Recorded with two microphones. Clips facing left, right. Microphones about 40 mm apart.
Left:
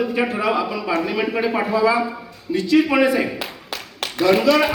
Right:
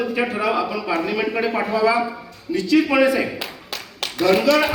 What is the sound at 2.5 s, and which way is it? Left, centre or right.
Speech, left.